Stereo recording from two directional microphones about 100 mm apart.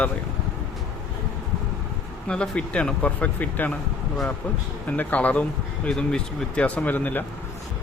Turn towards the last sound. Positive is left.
turn(degrees=15)  # may be behind; listen again after turning